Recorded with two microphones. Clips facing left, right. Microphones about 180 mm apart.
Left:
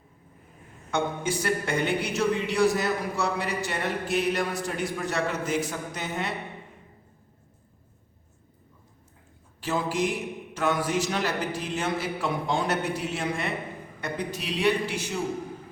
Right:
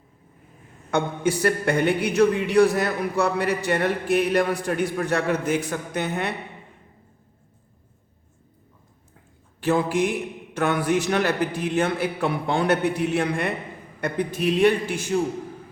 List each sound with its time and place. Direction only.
0.9 s speech: 60° right (ahead or behind)
9.6 s a sound: 60° right (ahead or behind)
10.5 s a man's voice: 60° right (ahead or behind)